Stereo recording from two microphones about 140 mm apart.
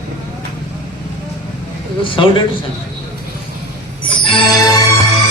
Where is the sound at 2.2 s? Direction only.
35° left (ahead or behind).